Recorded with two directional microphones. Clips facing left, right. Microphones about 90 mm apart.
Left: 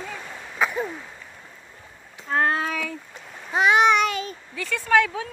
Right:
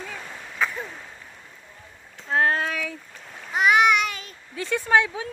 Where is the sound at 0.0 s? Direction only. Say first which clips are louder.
Left 1 dB; 5° left (ahead or behind).